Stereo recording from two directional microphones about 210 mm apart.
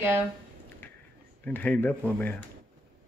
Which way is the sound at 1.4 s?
5° left (ahead or behind).